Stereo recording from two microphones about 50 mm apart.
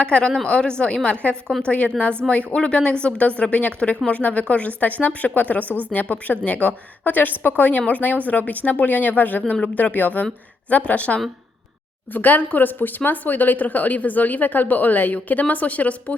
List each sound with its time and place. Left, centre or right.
0.0 s a woman's voice: centre